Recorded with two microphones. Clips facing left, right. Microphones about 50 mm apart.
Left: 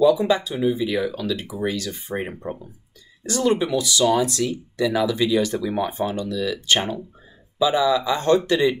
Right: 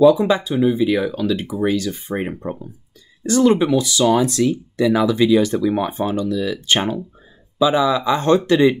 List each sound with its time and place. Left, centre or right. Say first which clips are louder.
0.0 s speech: right 4 dB; right
3.3 s speech: right 6 dB; right